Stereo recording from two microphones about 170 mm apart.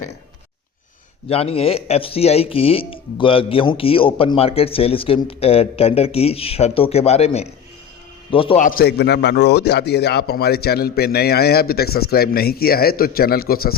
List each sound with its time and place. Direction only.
1.3 s speech: 35° left (ahead or behind)
8.8 s speech: 70° left (ahead or behind)